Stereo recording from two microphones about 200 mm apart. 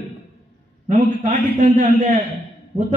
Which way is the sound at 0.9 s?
35° right (ahead or behind).